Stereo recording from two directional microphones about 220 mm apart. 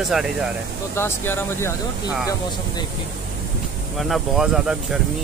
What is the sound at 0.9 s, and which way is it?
Speech, 10° left (ahead or behind).